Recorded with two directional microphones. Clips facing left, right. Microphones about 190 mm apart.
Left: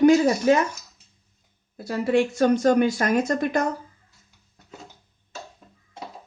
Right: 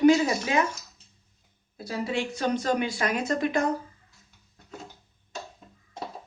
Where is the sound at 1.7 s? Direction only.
55° left (ahead or behind).